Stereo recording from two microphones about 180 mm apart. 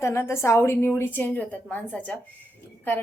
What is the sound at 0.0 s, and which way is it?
Speech, 15° left (ahead or behind).